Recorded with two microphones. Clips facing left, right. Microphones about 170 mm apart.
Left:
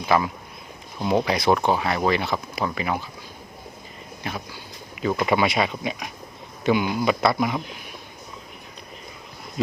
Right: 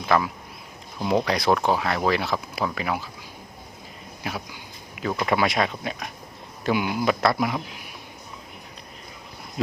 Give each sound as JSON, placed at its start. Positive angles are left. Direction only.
{"t": 0.0, "sound": "speech", "side_deg": 5}
{"t": 4.2, "sound": "speech", "side_deg": -5}